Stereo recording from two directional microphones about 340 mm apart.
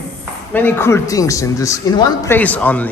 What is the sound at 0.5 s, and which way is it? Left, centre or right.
A man's voice, centre.